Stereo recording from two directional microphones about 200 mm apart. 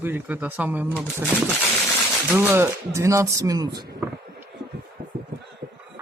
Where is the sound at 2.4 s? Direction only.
10° right (ahead or behind).